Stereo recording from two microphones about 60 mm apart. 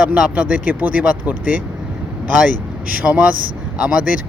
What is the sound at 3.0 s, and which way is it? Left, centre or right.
Speech, right.